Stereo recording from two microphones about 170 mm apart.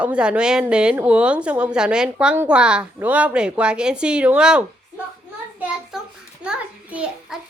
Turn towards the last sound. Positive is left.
turn(degrees=-5)  # may be behind; listen again after turning